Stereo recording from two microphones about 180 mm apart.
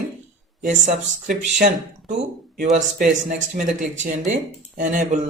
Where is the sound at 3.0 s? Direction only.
45° right (ahead or behind).